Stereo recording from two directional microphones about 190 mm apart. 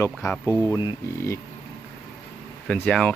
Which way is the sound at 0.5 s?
15° left (ahead or behind).